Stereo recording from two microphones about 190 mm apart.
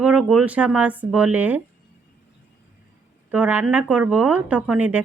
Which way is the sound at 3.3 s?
10° right (ahead or behind).